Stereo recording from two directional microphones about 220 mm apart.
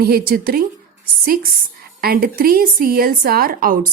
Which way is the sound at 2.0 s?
45° right (ahead or behind).